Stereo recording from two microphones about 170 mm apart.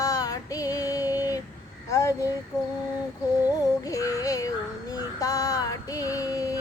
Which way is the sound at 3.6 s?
20° left (ahead or behind).